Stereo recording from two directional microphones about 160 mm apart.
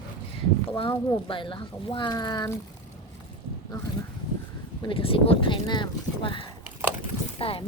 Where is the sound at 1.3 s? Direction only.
30° left (ahead or behind).